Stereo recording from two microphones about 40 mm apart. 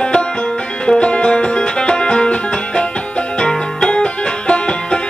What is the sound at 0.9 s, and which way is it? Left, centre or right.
Music, left.